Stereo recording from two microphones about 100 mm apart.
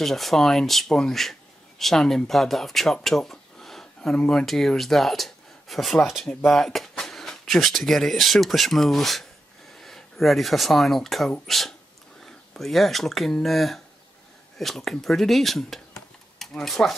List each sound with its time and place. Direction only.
0.0 s speech: centre (ahead or behind)